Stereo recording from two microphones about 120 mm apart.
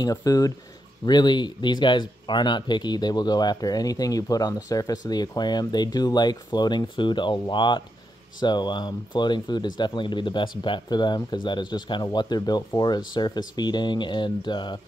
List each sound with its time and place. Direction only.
0.0 s speech: 30° left (ahead or behind)